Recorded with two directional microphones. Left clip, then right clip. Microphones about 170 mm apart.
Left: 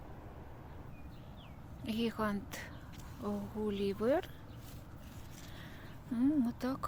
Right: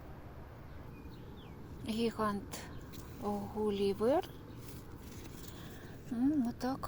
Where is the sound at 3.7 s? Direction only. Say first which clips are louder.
Right 2 dB; 10° left (ahead or behind).